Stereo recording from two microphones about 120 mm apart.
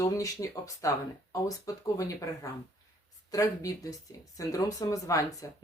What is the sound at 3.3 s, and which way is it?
Speech, 30° left (ahead or behind).